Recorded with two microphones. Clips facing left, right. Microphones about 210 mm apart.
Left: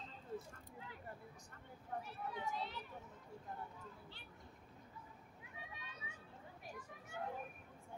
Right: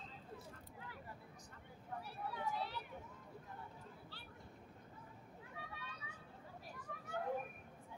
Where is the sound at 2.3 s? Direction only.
20° left (ahead or behind).